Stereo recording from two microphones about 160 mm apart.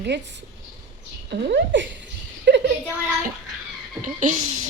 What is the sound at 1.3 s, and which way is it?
Speech, 90° right.